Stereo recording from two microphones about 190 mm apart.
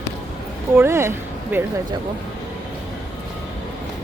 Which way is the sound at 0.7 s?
15° right (ahead or behind).